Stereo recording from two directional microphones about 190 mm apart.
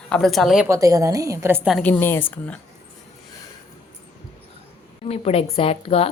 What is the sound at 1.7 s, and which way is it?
Speech, 10° left (ahead or behind).